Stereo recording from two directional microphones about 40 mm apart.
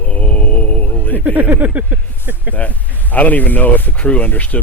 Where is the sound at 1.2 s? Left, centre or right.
Right.